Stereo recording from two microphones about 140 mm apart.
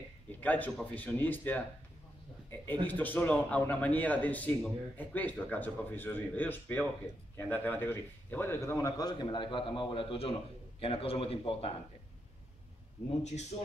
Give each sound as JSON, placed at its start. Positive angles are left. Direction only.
{"t": 0.4, "sound": "a man's voice", "side_deg": 10}
{"t": 2.9, "sound": "a man's voice", "side_deg": 10}